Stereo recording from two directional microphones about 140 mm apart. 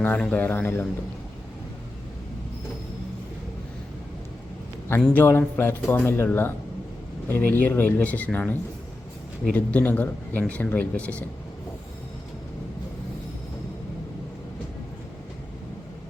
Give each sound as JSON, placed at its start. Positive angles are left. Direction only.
{"t": 0.0, "sound": "speech", "side_deg": 10}
{"t": 4.9, "sound": "speech", "side_deg": 10}